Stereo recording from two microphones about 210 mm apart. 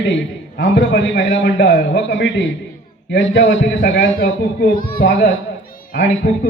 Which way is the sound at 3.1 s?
55° left (ahead or behind).